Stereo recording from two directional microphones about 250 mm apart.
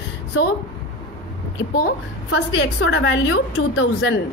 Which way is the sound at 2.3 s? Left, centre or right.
Left.